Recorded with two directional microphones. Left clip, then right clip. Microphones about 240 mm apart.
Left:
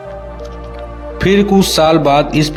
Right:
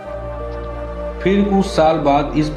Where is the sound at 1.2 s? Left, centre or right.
Left.